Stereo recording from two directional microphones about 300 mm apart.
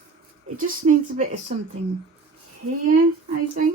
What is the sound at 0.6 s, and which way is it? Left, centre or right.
Speech, right.